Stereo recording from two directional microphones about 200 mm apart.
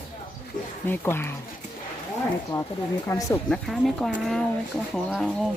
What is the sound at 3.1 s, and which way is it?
Speech, 15° left (ahead or behind).